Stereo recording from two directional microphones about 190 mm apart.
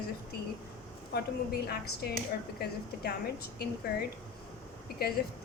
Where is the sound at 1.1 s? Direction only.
55° left (ahead or behind).